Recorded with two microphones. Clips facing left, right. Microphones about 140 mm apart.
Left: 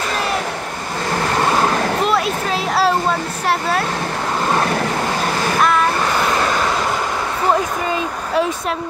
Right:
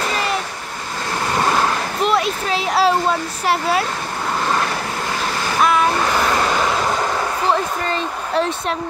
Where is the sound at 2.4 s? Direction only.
Centre (ahead or behind).